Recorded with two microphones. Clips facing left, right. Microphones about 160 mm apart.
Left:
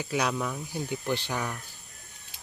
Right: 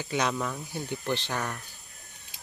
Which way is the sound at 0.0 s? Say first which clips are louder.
Even; 5° left (ahead or behind).